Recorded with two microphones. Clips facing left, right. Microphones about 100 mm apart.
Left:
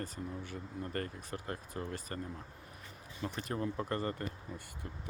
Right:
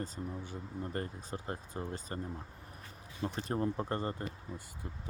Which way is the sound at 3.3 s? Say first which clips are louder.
Right 3 dB; 30° right (ahead or behind).